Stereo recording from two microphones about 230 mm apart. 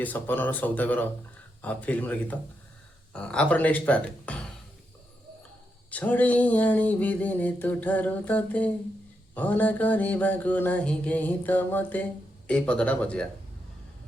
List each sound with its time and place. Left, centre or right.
0.0 s mantra: centre
3.1 s speech: centre
5.9 s mantra: centre